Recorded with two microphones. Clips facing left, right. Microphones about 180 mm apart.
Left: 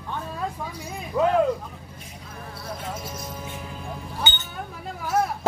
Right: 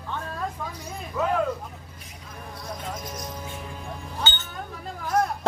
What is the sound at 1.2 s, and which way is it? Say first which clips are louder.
Vehicle: left 5 dB; 35° left (ahead or behind).